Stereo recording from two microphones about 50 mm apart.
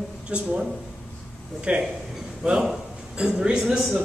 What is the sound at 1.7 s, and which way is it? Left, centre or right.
A man's voice, right.